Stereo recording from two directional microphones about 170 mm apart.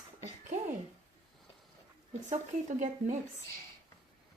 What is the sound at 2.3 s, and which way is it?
Speech, 45° right (ahead or behind).